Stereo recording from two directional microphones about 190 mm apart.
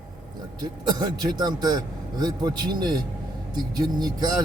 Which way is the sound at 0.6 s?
20° right (ahead or behind).